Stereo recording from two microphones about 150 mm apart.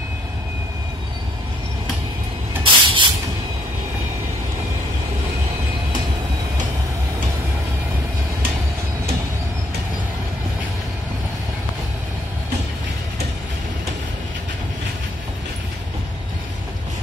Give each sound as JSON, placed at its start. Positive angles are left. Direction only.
{"t": 2.6, "sound": "spray", "side_deg": -35}